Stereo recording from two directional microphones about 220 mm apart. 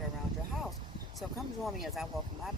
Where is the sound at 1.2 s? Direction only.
Centre (ahead or behind).